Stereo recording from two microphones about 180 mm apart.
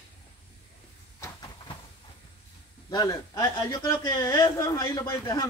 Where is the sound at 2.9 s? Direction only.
20° left (ahead or behind).